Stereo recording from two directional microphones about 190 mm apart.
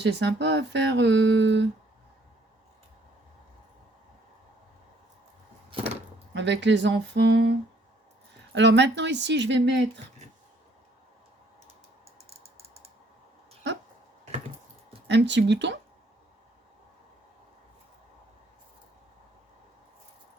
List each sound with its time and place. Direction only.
0.0 s speech: 65° right (ahead or behind)
6.3 s speech: 70° right (ahead or behind)
8.5 s speech: 65° right (ahead or behind)
15.0 s speech: 70° right (ahead or behind)